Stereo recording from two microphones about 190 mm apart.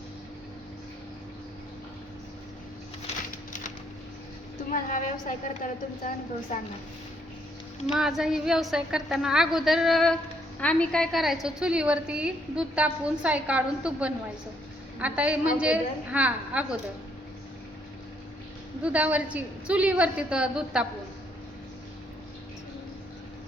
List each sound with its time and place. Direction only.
4.7 s a woman's voice: 45° left (ahead or behind)
7.9 s a woman's voice: 5° right (ahead or behind)
18.8 s a woman's voice: 5° right (ahead or behind)